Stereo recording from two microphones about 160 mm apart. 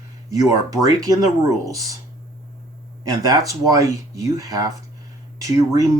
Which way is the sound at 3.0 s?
25° right (ahead or behind).